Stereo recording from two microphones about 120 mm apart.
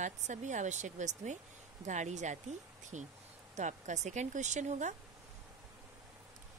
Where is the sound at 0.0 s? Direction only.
90° right.